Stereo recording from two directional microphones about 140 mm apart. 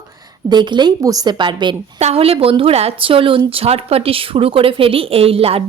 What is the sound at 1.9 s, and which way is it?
A woman's voice, 45° right (ahead or behind).